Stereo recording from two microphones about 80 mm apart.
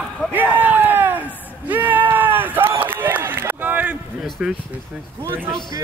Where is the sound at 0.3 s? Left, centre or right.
Right.